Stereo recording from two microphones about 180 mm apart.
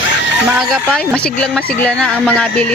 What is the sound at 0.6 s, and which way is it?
Speech, centre (ahead or behind).